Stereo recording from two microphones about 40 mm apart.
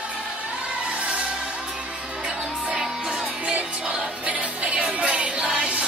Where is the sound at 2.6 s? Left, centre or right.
Centre.